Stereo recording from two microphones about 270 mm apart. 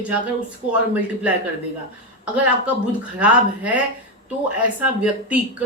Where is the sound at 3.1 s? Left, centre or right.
Centre.